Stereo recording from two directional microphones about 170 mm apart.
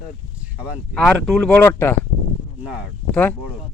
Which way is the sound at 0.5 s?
5° right (ahead or behind).